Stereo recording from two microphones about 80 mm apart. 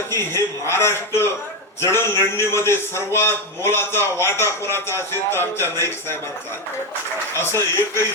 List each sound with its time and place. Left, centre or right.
0.1 s a man's voice: left
7.3 s a man's voice: left